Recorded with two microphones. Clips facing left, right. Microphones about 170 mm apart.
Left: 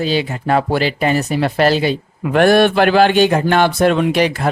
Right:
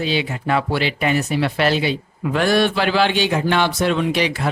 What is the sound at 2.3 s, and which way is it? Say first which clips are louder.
A man's voice: left 6 dB; 55° left (ahead or behind).